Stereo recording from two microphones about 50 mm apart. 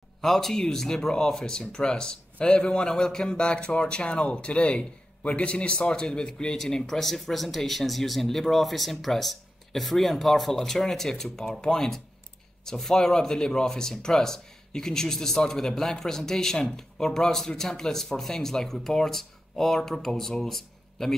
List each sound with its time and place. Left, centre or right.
0.2 s a man's voice: centre